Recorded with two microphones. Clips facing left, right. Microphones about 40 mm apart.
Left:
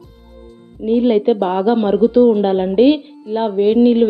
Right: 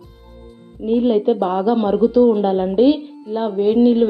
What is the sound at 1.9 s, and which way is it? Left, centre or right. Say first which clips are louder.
Speech: left 2 dB; left.